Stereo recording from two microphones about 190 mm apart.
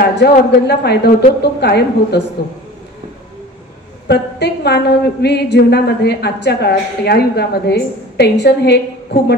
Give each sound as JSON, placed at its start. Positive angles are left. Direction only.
{"t": 0.1, "sound": "a woman's voice", "side_deg": 60}
{"t": 4.1, "sound": "a woman's voice", "side_deg": 60}